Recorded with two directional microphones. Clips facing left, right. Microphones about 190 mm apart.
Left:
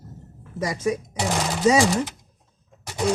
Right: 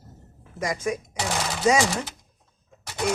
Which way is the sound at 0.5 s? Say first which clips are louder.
Left 1 dB; 30° left (ahead or behind).